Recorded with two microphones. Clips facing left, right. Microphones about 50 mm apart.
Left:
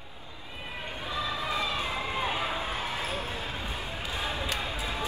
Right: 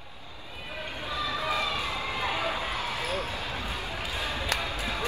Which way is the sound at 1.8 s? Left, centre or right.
Left.